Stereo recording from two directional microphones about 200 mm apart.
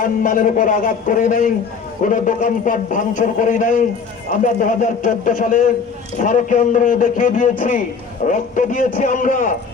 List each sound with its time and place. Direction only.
0.0 s a man's voice: 40° left (ahead or behind)